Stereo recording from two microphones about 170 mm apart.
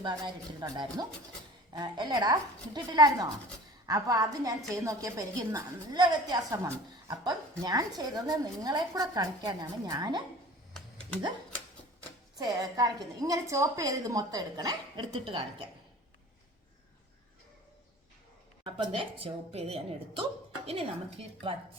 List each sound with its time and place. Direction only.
0.0 s a woman's voice: 25° right (ahead or behind)
12.4 s a woman's voice: 20° right (ahead or behind)
18.6 s speech: 35° right (ahead or behind)